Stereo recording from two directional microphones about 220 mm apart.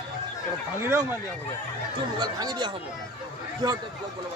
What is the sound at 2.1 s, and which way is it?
Speech, 20° right (ahead or behind).